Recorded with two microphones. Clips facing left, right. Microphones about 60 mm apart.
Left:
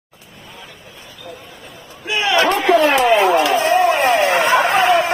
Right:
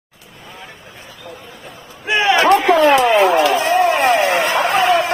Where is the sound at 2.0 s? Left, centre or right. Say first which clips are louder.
Right 2 dB; right.